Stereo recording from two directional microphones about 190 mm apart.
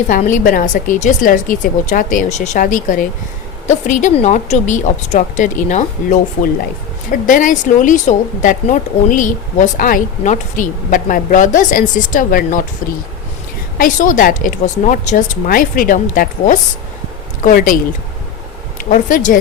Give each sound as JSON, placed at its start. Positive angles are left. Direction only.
{"t": 0.1, "sound": "a woman's voice", "side_deg": 45}
{"t": 13.7, "sound": "speech", "side_deg": 45}
{"t": 18.8, "sound": "speech", "side_deg": 45}